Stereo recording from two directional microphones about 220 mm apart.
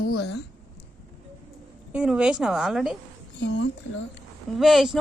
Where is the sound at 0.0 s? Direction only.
45° left (ahead or behind).